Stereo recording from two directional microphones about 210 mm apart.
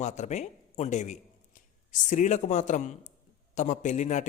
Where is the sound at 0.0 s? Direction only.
35° left (ahead or behind).